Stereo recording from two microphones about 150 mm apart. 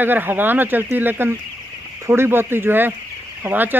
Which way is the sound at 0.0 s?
15° right (ahead or behind).